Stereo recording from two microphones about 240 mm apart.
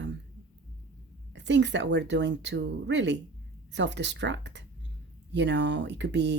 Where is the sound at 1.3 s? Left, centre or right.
Right.